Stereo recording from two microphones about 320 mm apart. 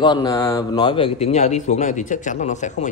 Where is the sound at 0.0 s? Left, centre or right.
Centre.